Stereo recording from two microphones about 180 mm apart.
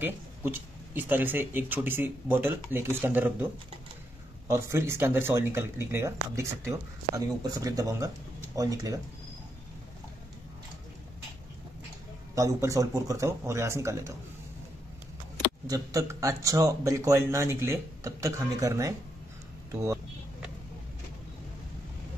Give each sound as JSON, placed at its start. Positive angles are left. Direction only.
{"t": 0.0, "sound": "speech", "side_deg": -10}
{"t": 4.5, "sound": "speech", "side_deg": -15}
{"t": 7.2, "sound": "speech", "side_deg": -20}
{"t": 12.4, "sound": "speech", "side_deg": -15}
{"t": 15.7, "sound": "speech", "side_deg": -20}